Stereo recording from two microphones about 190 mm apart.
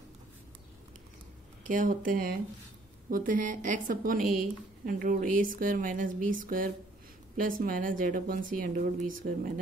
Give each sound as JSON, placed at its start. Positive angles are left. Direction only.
{"t": 1.7, "sound": "speech", "side_deg": -45}